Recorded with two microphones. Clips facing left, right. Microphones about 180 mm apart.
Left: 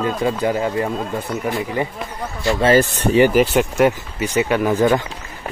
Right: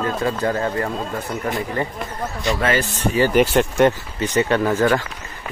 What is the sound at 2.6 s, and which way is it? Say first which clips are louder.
Speech: left 7 dB; 30° left (ahead or behind).